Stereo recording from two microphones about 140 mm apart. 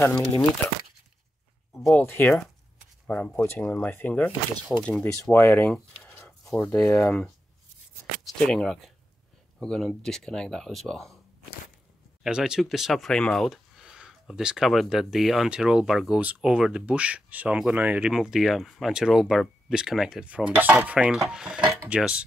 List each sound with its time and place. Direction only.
1.7 s a sound: centre (ahead or behind)
2.0 s speech: 15° left (ahead or behind)
5.7 s a sound: 10° left (ahead or behind)
6.8 s speech: 20° left (ahead or behind)
8.3 s speech: 5° left (ahead or behind)
12.2 s speech: 5° right (ahead or behind)
21.3 s cutlery: 5° right (ahead or behind)